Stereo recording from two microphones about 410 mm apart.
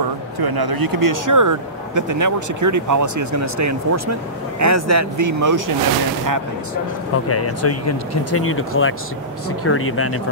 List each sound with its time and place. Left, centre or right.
0.4 s speech: right
7.2 s speech: left